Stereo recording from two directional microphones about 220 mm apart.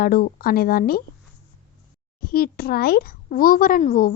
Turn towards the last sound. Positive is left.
turn(degrees=35)  # may be behind; listen again after turning